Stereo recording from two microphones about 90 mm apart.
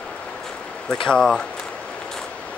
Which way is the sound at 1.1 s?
10° left (ahead or behind).